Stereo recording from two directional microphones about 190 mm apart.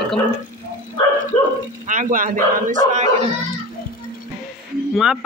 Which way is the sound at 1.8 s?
45° right (ahead or behind).